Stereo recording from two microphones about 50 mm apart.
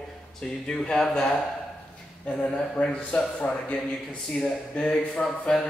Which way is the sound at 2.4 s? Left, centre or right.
Left.